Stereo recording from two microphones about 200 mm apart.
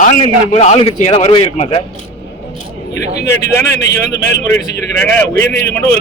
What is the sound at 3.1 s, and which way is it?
Speech, 60° left (ahead or behind).